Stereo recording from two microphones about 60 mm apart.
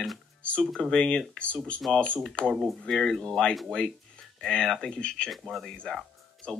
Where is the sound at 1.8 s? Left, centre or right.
Centre.